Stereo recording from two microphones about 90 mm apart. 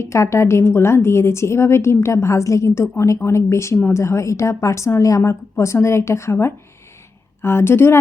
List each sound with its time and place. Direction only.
0.0 s a woman's voice: 35° left (ahead or behind)